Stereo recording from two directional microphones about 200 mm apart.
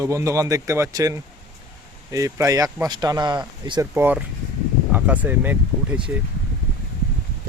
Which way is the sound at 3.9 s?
10° right (ahead or behind).